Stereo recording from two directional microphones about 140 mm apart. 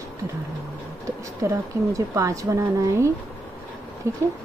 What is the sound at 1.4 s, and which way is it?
A woman's voice, 20° right (ahead or behind).